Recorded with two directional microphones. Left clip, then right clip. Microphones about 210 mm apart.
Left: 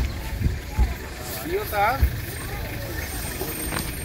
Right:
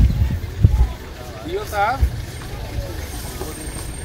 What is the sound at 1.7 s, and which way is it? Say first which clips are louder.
Speech: right 3 dB; 5° left (ahead or behind).